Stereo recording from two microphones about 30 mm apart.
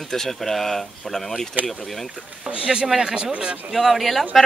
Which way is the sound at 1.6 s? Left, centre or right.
Right.